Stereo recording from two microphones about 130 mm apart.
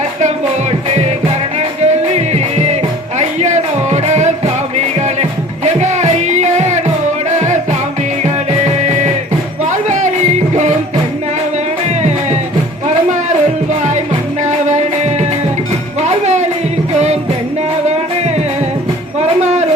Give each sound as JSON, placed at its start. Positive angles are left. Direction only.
{"t": 1.8, "sound": "music", "side_deg": -55}
{"t": 8.8, "sound": "music", "side_deg": -65}
{"t": 14.4, "sound": "music", "side_deg": -65}
{"t": 19.4, "sound": "a sound", "side_deg": -60}